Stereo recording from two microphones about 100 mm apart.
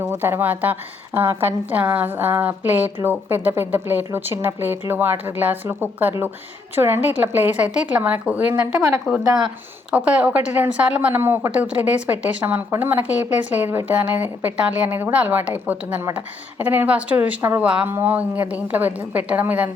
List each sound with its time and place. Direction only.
0.0 s a woman's voice: 20° right (ahead or behind)